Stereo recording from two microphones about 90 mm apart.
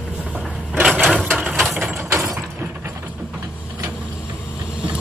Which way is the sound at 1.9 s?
30° right (ahead or behind).